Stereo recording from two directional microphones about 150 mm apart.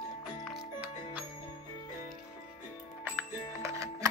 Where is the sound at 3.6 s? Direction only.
20° right (ahead or behind).